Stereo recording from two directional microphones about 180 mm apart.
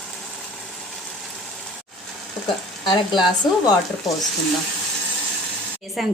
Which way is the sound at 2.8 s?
25° left (ahead or behind).